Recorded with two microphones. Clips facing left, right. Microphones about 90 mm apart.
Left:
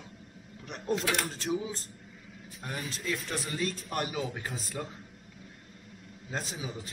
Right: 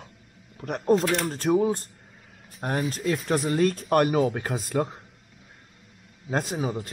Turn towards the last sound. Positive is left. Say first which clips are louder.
# right 10 dB
turn(degrees=-50)  # may be behind; listen again after turning